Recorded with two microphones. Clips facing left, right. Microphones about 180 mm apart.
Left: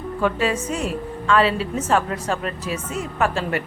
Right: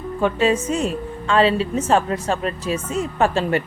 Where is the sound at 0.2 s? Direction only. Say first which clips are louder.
Right 3 dB; 25° right (ahead or behind).